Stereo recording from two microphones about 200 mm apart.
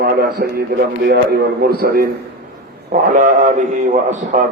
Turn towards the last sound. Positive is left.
turn(degrees=-40)  # may be behind; listen again after turning